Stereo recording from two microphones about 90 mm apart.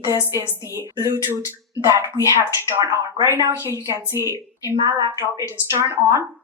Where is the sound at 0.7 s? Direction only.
30° right (ahead or behind).